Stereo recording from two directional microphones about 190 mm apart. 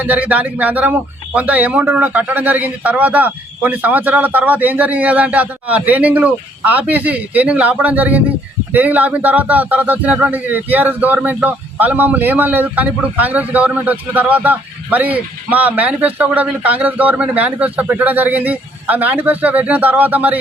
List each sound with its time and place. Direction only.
0.0 s speech: 10° right (ahead or behind)